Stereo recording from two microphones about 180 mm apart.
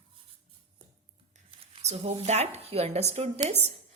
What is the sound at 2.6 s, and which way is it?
Speech, 35° right (ahead or behind).